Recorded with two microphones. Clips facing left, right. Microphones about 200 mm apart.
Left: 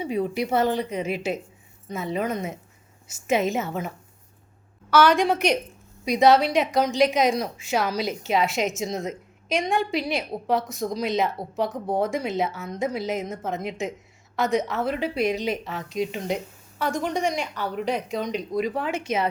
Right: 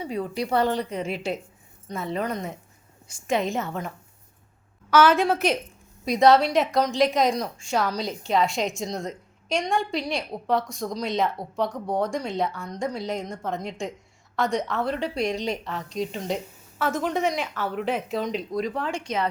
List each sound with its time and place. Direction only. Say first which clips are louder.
0.0 s speech: left 3 dB; 20° left (ahead or behind)
0.6 s a woman's voice: left 1 dB; centre (ahead or behind)
5.0 s a woman's voice: left 1 dB; centre (ahead or behind)